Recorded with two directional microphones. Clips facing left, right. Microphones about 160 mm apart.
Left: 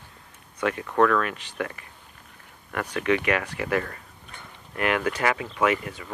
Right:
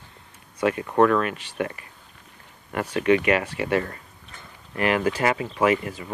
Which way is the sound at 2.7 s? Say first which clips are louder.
Right 4 dB; 30° right (ahead or behind).